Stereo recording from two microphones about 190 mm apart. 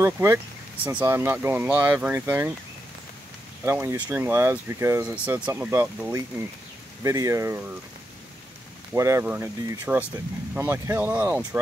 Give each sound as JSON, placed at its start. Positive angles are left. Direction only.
{"t": 0.0, "sound": "speech", "side_deg": -15}
{"t": 3.6, "sound": "speech", "side_deg": -10}
{"t": 8.9, "sound": "speech", "side_deg": -15}